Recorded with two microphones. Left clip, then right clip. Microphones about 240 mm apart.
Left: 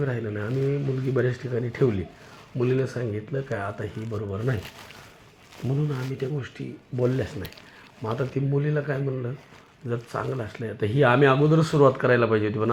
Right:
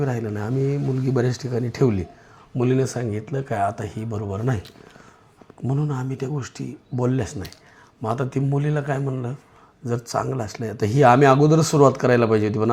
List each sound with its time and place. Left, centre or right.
0.0 s speech: right
5.6 s speech: right